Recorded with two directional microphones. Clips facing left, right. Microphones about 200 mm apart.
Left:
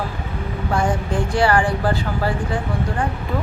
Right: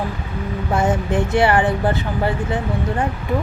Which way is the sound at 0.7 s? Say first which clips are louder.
Right 2 dB; 20° right (ahead or behind).